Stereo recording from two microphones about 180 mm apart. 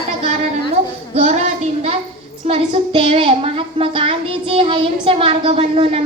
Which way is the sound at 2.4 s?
30° right (ahead or behind).